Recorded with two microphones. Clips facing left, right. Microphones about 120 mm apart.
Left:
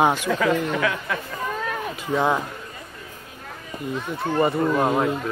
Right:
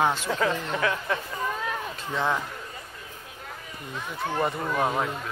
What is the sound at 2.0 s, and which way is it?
Speech, 15° left (ahead or behind).